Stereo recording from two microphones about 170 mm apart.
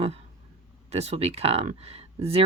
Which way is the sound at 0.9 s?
40° right (ahead or behind).